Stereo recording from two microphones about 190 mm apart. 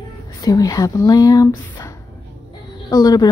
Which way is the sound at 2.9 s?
20° left (ahead or behind).